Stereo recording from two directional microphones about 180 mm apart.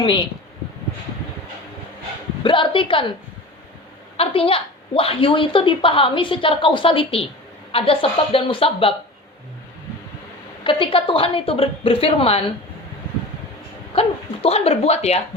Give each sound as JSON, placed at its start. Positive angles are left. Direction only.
{"t": 2.4, "sound": "a woman's voice", "side_deg": 30}
{"t": 4.2, "sound": "a woman's voice", "side_deg": 30}
{"t": 10.6, "sound": "a woman's voice", "side_deg": 30}
{"t": 13.9, "sound": "a woman's voice", "side_deg": 35}